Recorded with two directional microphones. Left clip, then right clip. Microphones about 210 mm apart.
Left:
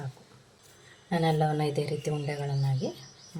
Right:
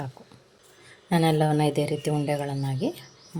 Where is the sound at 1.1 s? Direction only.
35° right (ahead or behind).